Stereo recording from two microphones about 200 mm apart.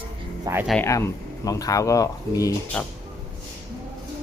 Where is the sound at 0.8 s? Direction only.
15° left (ahead or behind).